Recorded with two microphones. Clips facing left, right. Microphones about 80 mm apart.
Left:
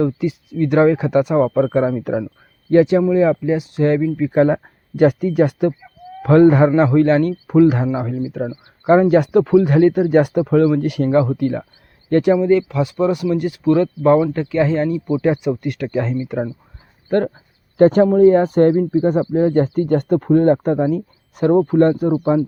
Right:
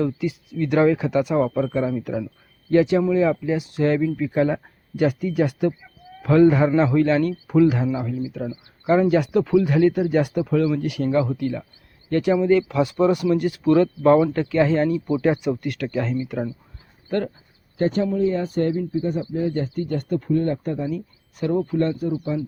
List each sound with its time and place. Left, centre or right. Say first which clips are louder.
0.0 s speech: left 5 dB; left
3.0 s speech: left 5 dB; centre
4.3 s speech: left 8 dB; left
4.9 s speech: left 6 dB; left
12.4 s speech: left 3 dB; centre
15.4 s speech: left 3 dB; left
17.1 s speech: left 7 dB; left
17.7 s speech: left 10 dB; left
18.0 s speech: left 10 dB; left
18.7 s speech: left 8 dB; left
18.9 s speech: left 8 dB; left
20.2 s speech: left 9 dB; left